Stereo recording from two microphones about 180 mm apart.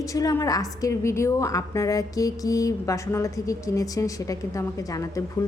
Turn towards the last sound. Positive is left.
turn(degrees=20)  # may be behind; listen again after turning